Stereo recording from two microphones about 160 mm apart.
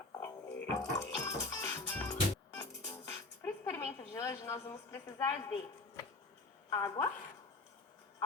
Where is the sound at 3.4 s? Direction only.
15° left (ahead or behind).